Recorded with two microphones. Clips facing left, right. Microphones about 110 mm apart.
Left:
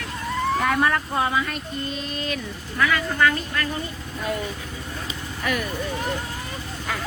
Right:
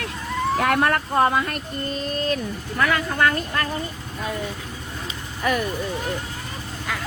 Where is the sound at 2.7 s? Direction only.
50° right (ahead or behind).